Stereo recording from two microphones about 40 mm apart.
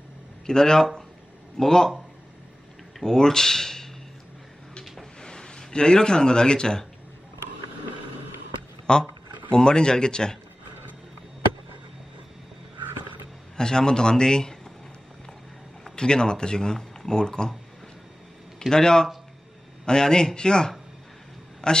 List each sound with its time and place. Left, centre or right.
0.5 s speech: centre
3.0 s speech: centre
5.2 s speech: left
8.9 s speech: centre
13.6 s speech: centre
15.8 s speech: centre
18.7 s a man's voice: centre